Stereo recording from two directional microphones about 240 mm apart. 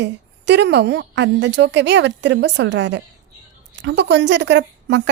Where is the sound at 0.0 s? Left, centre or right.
Right.